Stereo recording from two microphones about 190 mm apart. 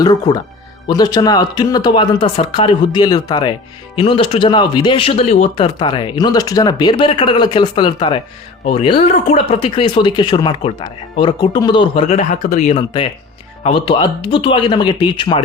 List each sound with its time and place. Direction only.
0.0 s speech: 20° left (ahead or behind); by 12.7 s 40° left (ahead or behind)
12.7 s speech: 25° left (ahead or behind)